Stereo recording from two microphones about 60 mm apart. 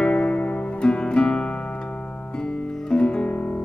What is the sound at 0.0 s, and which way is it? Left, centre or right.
Music, centre.